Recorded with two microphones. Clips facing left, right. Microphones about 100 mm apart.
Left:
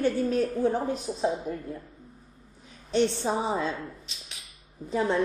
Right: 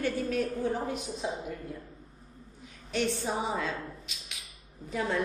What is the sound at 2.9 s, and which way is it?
A woman's voice, 30° left (ahead or behind).